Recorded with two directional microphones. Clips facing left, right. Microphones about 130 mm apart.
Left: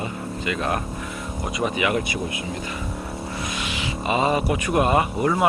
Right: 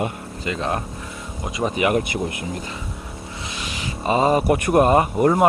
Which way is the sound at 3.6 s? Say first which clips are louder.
Right 4 dB; 40° right (ahead or behind).